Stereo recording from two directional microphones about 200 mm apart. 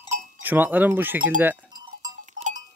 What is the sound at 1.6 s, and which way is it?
Sheep, 20° right (ahead or behind).